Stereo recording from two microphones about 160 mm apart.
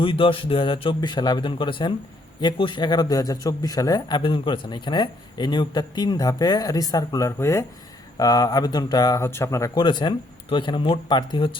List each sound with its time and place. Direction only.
0.0 s a man's voice: 35° left (ahead or behind)